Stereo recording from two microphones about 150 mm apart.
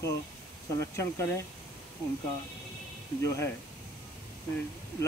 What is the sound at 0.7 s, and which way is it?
Speech, 20° left (ahead or behind).